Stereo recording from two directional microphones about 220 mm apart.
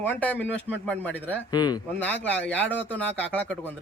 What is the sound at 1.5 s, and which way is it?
Speech, 20° left (ahead or behind).